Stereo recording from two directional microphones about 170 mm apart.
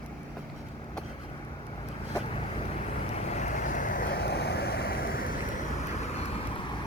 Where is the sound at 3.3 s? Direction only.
45° left (ahead or behind).